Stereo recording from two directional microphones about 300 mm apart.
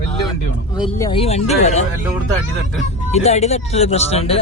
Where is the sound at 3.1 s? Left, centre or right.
Left.